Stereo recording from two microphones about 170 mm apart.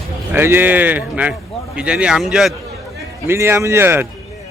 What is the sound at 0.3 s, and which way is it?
Speech, 15° right (ahead or behind).